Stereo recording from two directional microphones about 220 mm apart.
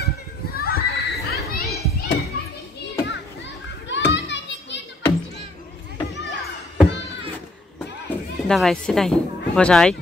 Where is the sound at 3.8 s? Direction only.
55° left (ahead or behind).